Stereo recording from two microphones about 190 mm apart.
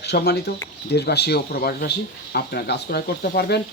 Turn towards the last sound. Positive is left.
turn(degrees=55)  # may be behind; listen again after turning